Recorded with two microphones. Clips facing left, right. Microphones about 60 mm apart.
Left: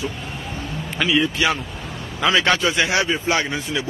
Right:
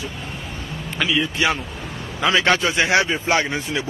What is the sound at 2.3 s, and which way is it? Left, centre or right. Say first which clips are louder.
Speech: even; right.